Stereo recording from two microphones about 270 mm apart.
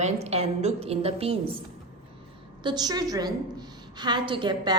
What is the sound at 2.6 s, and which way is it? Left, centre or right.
A woman's voice, centre.